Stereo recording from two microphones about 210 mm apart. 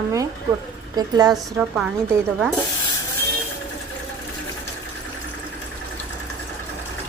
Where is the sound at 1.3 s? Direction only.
5° right (ahead or behind).